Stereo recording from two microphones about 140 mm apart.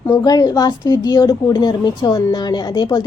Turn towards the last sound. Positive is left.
turn(degrees=30)  # may be behind; listen again after turning